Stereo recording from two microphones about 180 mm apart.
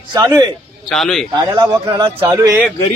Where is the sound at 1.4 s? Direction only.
20° right (ahead or behind).